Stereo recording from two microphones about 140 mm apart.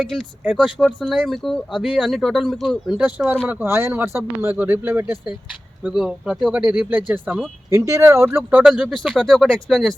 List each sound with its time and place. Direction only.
0.0 s speech: 5° right (ahead or behind)
0.9 s speech: 5° left (ahead or behind); by 5.1 s 15° right (ahead or behind)
5.8 s speech: 5° right (ahead or behind)
9.1 s speech: 5° left (ahead or behind)